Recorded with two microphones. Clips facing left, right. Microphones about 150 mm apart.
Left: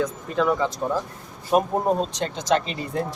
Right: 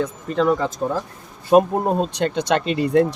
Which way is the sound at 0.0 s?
35° right (ahead or behind).